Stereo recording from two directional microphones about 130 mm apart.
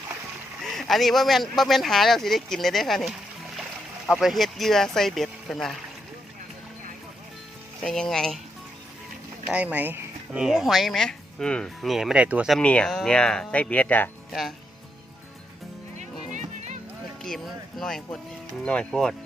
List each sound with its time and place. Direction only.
0.6 s speech: centre (ahead or behind)
7.8 s speech: 5° left (ahead or behind)
9.5 s speech: 10° right (ahead or behind)
12.5 s speech: 5° left (ahead or behind)
16.0 s music: 65° right (ahead or behind)
17.2 s speech: centre (ahead or behind)